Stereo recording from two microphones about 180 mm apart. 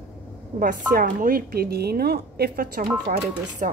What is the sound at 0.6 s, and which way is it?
A woman's voice, 50° right (ahead or behind).